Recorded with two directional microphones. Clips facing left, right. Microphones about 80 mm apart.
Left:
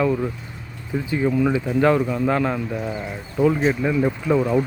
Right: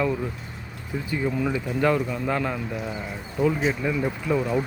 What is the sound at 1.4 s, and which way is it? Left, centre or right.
Speech, left.